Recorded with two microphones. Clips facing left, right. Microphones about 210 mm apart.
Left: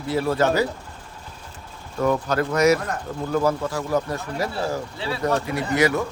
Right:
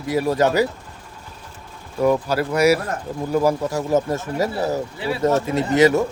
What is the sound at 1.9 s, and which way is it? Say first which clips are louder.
Speech: right 3 dB; 10° right (ahead or behind).